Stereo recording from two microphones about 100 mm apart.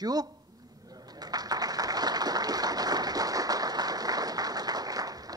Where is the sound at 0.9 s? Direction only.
40° right (ahead or behind).